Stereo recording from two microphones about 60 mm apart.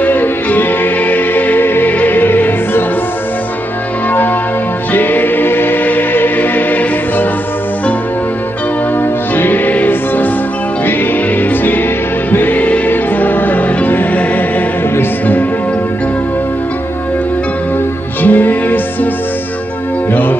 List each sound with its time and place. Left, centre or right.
0.0 s music: left
4.9 s music: left
9.3 s music: left
18.2 s music: left
20.1 s music: left